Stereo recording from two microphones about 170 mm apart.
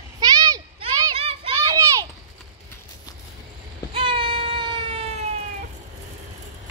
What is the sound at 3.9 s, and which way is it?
Baby cry, 30° right (ahead or behind).